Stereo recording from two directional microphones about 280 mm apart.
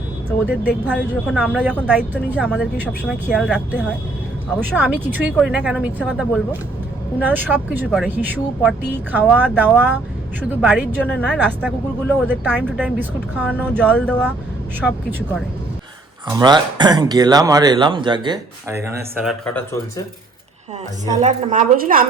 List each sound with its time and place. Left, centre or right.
0.4 s a woman's voice: centre
16.3 s speech: centre
21.2 s a woman's voice: right